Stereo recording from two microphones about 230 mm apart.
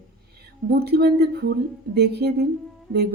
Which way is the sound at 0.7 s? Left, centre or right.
Right.